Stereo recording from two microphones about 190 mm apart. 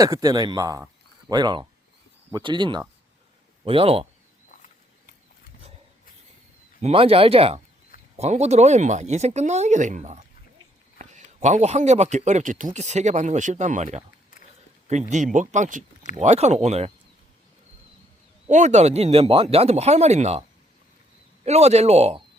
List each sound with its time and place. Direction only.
0.0 s speech: 20° right (ahead or behind)
6.8 s a man's voice: 30° right (ahead or behind)
15.1 s a man's voice: 40° right (ahead or behind)
18.4 s a man's voice: 35° right (ahead or behind)
21.4 s a man's voice: 35° right (ahead or behind)